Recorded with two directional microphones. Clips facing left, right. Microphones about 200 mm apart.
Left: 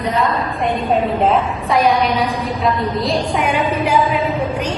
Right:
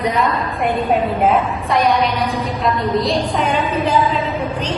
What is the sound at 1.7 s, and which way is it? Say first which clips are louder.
A woman's voice: left 1 dB; centre (ahead or behind).